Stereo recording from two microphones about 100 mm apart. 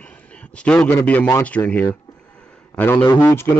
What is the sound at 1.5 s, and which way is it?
A man's voice, 15° left (ahead or behind).